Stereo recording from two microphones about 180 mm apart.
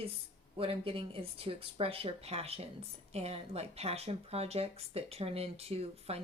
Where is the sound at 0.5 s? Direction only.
30° right (ahead or behind).